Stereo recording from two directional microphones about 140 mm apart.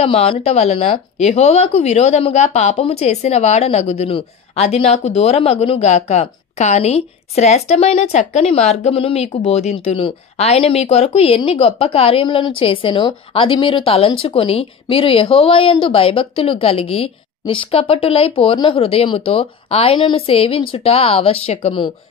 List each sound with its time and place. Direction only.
0.0 s speech: 45° left (ahead or behind)